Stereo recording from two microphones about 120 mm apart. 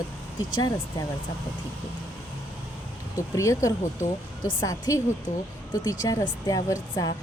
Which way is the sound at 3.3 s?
25° left (ahead or behind).